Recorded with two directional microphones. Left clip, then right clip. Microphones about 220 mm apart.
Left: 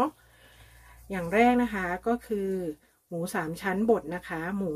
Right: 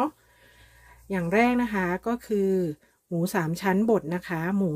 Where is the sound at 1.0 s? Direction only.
45° right (ahead or behind).